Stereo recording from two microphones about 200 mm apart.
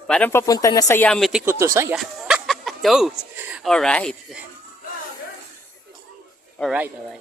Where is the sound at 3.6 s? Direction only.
5° left (ahead or behind).